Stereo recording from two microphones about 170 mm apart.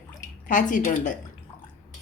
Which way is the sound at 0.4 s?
50° left (ahead or behind).